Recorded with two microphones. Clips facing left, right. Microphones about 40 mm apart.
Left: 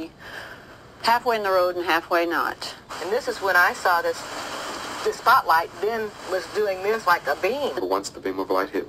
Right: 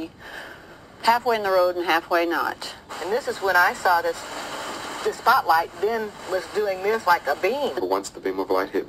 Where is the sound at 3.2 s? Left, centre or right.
Right.